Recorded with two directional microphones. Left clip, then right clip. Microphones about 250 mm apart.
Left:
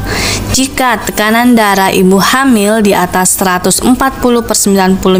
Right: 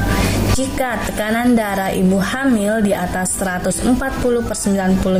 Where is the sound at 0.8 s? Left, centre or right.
Left.